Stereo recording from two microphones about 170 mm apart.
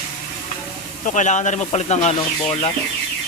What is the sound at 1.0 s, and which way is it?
Speech, 45° left (ahead or behind).